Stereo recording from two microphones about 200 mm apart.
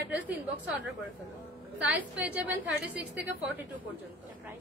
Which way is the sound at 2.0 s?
10° right (ahead or behind).